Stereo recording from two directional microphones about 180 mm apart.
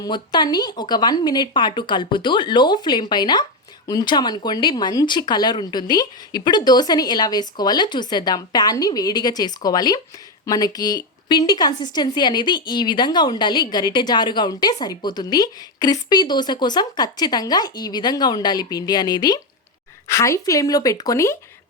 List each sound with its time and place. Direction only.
0.0 s a woman's voice: 25° left (ahead or behind)